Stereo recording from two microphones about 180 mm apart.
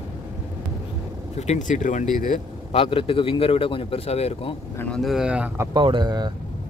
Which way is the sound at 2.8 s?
30° left (ahead or behind).